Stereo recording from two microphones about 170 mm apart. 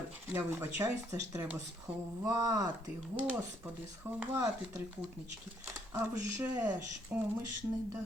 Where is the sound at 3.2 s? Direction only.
10° right (ahead or behind).